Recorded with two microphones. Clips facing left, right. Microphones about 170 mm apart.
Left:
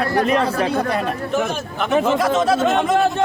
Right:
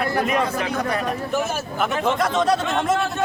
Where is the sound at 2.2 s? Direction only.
5° left (ahead or behind).